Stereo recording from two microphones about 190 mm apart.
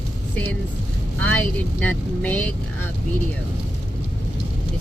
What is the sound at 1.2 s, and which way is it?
Speech, 10° left (ahead or behind).